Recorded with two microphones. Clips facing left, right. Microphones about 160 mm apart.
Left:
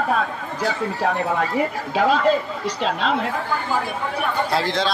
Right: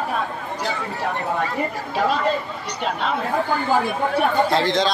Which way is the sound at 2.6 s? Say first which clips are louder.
Left 2 dB; 90° left.